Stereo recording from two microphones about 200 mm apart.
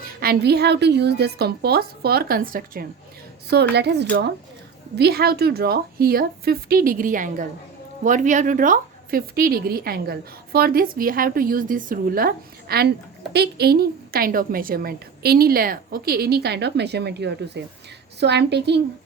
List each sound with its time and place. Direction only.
0.2 s a woman's voice: 50° right (ahead or behind)
3.5 s a woman's voice: 55° right (ahead or behind)